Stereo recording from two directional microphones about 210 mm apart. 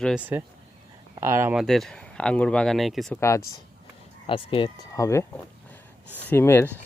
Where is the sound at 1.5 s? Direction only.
Centre (ahead or behind).